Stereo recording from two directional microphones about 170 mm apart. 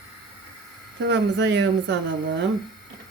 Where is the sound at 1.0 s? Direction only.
90° right.